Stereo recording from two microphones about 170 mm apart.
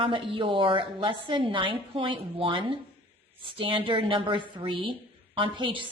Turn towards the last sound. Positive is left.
turn(degrees=-30)  # may be behind; listen again after turning